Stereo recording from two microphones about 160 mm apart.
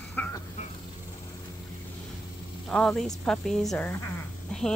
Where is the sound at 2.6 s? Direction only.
5° left (ahead or behind).